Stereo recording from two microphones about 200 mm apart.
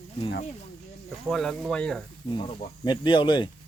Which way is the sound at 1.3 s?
5° left (ahead or behind).